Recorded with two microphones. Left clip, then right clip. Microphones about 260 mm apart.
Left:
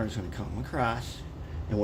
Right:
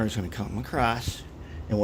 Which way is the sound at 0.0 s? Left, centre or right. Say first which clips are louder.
Right 4 dB; right.